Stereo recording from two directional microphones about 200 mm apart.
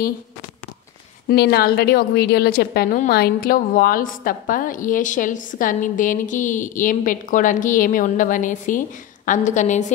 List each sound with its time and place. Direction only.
1.3 s a woman's voice: 55° left (ahead or behind); by 9.8 s 35° left (ahead or behind)